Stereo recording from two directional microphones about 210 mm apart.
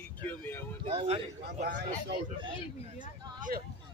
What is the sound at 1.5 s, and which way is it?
Speech, 40° right (ahead or behind).